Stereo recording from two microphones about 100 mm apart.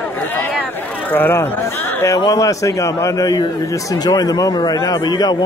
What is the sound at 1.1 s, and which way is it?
A man's voice, 20° left (ahead or behind).